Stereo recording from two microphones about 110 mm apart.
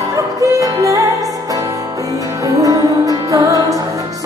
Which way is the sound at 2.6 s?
30° right (ahead or behind).